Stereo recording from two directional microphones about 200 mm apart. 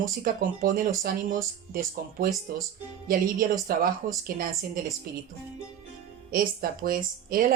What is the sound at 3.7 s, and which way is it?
Speech, 45° right (ahead or behind).